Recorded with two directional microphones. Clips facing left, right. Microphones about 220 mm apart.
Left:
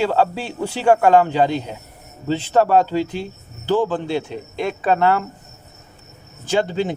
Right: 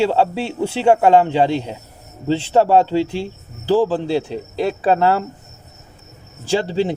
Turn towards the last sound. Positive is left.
turn(degrees=-30)  # may be behind; listen again after turning